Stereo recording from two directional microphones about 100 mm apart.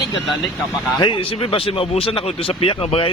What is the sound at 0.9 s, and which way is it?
Speech, 50° left (ahead or behind).